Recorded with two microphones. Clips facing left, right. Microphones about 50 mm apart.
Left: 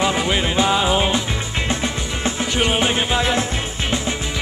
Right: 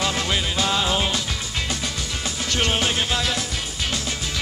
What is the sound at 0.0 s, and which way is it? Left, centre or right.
Music, centre.